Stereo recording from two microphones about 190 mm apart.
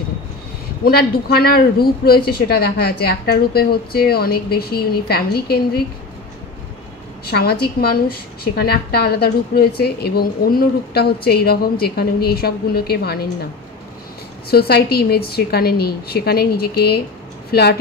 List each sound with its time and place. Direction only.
0.8 s a woman's voice: 55° left (ahead or behind)
7.2 s a woman's voice: 55° left (ahead or behind)
14.5 s a woman's voice: 55° left (ahead or behind)